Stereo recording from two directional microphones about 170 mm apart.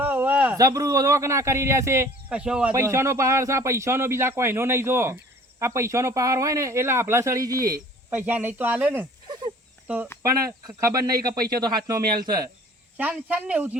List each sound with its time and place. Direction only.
0.0 s a sound: 10° right (ahead or behind)
0.5 s speech: 20° right (ahead or behind)
8.1 s speech: 10° right (ahead or behind)
9.2 s a sound: 25° right (ahead or behind)
9.8 s speech: 10° right (ahead or behind)
10.8 s speech: 20° right (ahead or behind)
13.0 s speech: 10° right (ahead or behind)